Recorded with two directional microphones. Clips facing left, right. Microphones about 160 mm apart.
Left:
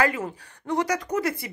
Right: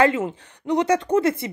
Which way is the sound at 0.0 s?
25° right (ahead or behind).